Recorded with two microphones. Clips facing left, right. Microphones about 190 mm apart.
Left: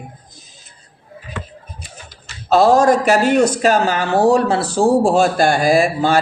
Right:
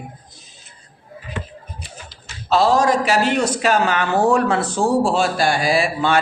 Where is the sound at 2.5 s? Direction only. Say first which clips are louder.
Left 4 dB; 50° left (ahead or behind).